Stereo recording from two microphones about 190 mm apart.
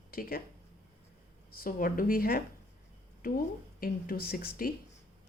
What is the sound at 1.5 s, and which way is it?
Speech, 45° left (ahead or behind).